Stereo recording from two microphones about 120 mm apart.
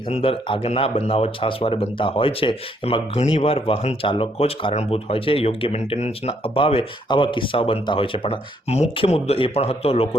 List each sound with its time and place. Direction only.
0.1 s speech: 50° left (ahead or behind)
0.6 s speech: 60° left (ahead or behind)